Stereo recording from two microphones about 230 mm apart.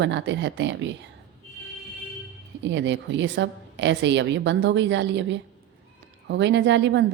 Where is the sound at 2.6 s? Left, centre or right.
Right.